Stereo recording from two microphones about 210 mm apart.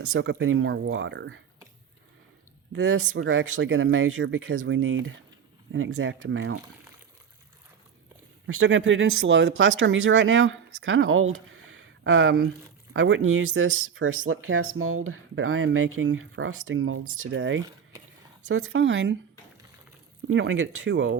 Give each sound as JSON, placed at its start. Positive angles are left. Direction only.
{"t": 0.0, "sound": "speech", "side_deg": -75}
{"t": 2.7, "sound": "speech", "side_deg": -85}
{"t": 8.4, "sound": "speech", "side_deg": -75}
{"t": 20.3, "sound": "speech", "side_deg": -65}